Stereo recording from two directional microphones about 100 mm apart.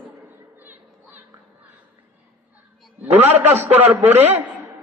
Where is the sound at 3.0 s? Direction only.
20° right (ahead or behind).